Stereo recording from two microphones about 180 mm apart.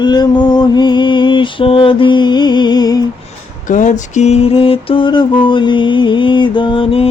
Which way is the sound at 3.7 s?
45° left (ahead or behind).